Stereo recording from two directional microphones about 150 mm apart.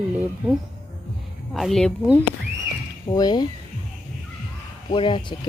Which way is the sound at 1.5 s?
Centre (ahead or behind).